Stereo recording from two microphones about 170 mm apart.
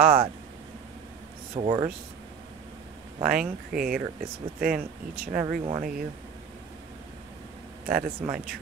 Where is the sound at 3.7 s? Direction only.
55° right (ahead or behind).